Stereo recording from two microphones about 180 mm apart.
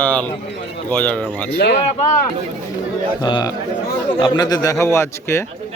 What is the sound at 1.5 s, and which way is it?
Speech, 65° left (ahead or behind).